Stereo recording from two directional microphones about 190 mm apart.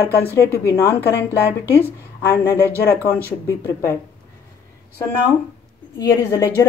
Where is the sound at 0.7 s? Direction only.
15° left (ahead or behind).